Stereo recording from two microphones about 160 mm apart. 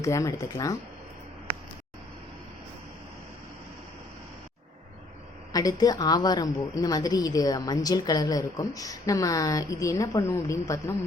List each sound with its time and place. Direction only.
0.0 s a woman's voice: 20° left (ahead or behind)
5.5 s a woman's voice: 20° left (ahead or behind)